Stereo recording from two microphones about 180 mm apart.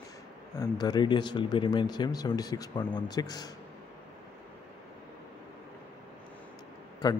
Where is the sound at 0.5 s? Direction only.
20° left (ahead or behind).